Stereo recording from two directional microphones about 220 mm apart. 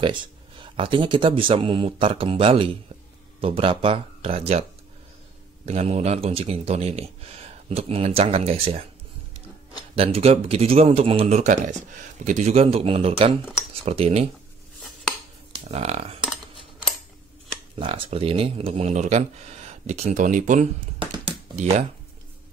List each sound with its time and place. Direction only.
0.0 s a man's voice: 20° right (ahead or behind)
5.7 s a man's voice: 30° right (ahead or behind)
9.9 s a man's voice: 25° right (ahead or behind)
15.7 s a man's voice: 30° right (ahead or behind)
17.7 s a man's voice: 25° right (ahead or behind)
21.0 s typing: 30° right (ahead or behind)